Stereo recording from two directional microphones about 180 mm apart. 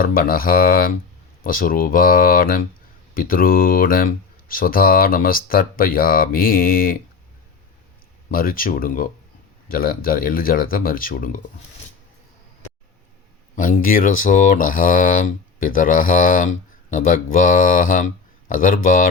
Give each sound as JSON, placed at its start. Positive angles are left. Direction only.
{"t": 0.0, "sound": "speech", "side_deg": 50}
{"t": 8.3, "sound": "speech", "side_deg": 55}
{"t": 13.6, "sound": "speech", "side_deg": 50}